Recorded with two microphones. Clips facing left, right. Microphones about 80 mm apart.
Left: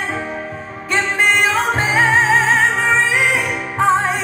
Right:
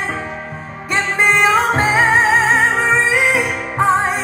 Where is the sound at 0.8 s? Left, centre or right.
Right.